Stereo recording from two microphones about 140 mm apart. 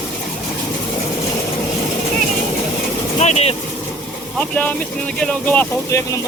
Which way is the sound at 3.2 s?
50° left (ahead or behind).